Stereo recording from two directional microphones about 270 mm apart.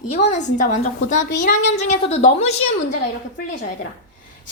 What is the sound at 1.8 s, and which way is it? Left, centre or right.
Speech, left.